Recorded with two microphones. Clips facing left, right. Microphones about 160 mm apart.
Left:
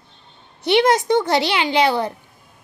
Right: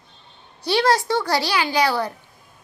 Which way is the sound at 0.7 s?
20° left (ahead or behind).